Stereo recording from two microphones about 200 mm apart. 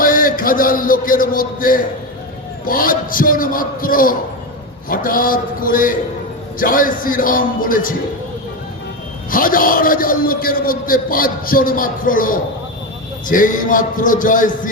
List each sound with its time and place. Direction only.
0.0 s a man's voice: 45° left (ahead or behind)
9.3 s a man's voice: 45° left (ahead or behind)